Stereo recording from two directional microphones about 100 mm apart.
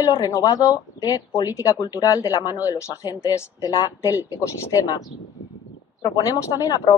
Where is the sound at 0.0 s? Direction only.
35° left (ahead or behind).